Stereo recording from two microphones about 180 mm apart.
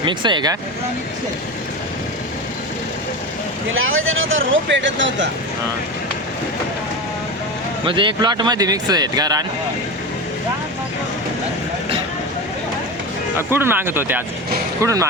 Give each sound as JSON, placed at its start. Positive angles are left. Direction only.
{"t": 0.0, "sound": "speech", "side_deg": -25}
{"t": 3.8, "sound": "speech", "side_deg": -90}
{"t": 7.9, "sound": "speech", "side_deg": -25}
{"t": 13.5, "sound": "speech", "side_deg": -10}